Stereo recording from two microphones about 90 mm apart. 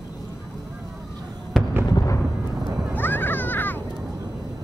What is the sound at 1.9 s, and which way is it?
Music, 40° left (ahead or behind).